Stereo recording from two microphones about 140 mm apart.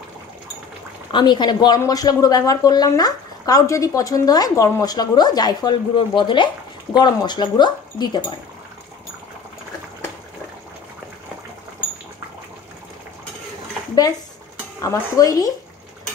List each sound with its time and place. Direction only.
1.1 s speech: 30° left (ahead or behind)
14.8 s speech: 25° left (ahead or behind)